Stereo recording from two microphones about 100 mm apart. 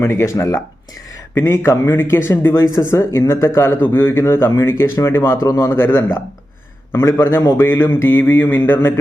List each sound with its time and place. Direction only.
0.0 s speech: 25° left (ahead or behind)